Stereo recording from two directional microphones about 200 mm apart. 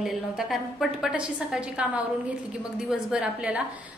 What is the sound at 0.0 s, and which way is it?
A woman's voice, centre (ahead or behind).